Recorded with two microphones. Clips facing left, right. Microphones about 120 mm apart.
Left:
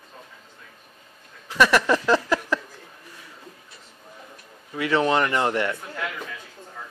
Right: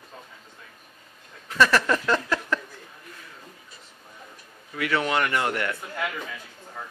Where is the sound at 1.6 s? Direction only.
15° left (ahead or behind).